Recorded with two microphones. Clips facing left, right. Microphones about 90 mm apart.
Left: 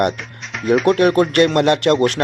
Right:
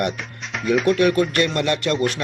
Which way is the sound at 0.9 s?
50° left (ahead or behind).